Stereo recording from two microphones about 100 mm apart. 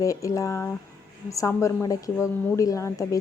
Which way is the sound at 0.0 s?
35° left (ahead or behind).